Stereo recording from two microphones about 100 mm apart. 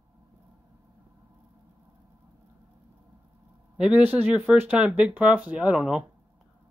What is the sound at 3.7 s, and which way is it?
Speech, 10° right (ahead or behind).